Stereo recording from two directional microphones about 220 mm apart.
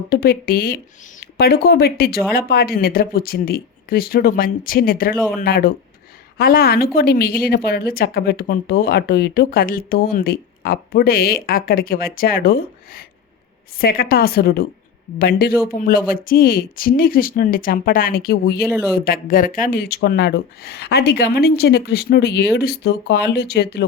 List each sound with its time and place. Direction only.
0.1 s a woman's voice: 45° left (ahead or behind)